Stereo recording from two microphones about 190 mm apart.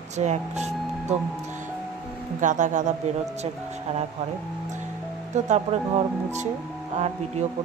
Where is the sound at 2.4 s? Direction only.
40° right (ahead or behind).